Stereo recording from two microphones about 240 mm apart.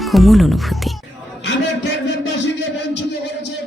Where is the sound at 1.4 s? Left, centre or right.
Left.